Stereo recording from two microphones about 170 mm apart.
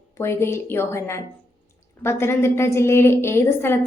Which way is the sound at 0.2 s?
15° left (ahead or behind).